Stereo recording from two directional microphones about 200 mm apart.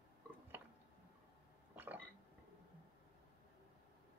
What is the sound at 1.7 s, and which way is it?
Burping, 10° right (ahead or behind).